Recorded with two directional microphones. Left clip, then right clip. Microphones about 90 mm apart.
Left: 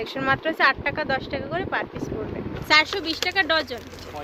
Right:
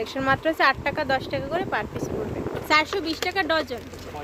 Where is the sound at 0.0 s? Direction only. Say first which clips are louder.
Right 1 dB; 40° right (ahead or behind).